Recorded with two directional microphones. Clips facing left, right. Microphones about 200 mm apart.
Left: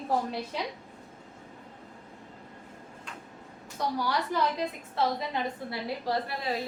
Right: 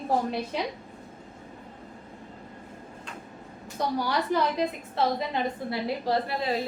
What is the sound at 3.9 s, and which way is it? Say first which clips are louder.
Speech: right 3 dB; 20° right (ahead or behind).